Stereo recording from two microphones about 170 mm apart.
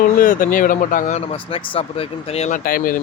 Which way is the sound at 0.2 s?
55° left (ahead or behind).